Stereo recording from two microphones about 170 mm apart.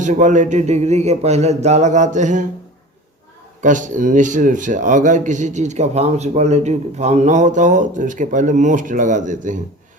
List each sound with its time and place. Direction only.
0.0 s a man's voice: 45° right (ahead or behind)
3.6 s a man's voice: 50° right (ahead or behind)